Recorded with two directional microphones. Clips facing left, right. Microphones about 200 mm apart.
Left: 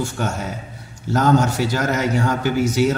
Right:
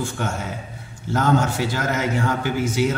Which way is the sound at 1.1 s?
40° left (ahead or behind).